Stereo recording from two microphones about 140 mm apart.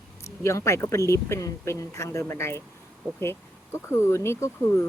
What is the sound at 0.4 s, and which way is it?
Speech, 20° left (ahead or behind).